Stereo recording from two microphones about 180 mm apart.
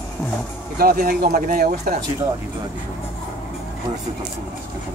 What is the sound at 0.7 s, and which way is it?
Speech, 55° right (ahead or behind).